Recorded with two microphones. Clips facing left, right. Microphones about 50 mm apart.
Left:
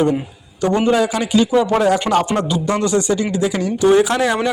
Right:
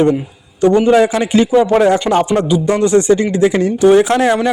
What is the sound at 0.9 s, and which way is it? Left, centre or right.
Speech, right.